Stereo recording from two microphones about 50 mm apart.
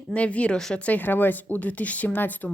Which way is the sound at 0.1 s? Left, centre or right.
Left.